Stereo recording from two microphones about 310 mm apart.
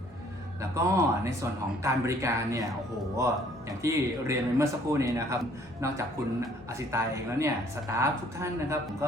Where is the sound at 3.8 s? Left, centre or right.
Centre.